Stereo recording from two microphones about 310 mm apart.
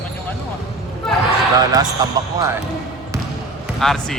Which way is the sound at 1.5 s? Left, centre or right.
Centre.